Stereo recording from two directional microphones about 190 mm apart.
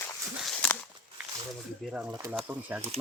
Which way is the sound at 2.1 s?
15° right (ahead or behind).